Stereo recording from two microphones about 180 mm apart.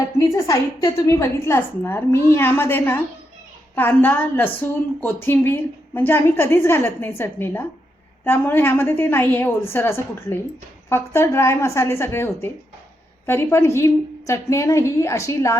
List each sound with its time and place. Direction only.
0.3 s a woman's voice: 20° left (ahead or behind)